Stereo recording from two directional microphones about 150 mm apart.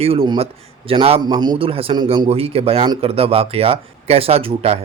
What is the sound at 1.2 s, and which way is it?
A man's voice, 30° right (ahead or behind).